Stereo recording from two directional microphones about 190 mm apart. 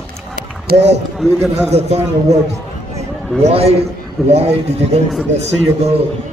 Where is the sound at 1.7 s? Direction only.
35° right (ahead or behind).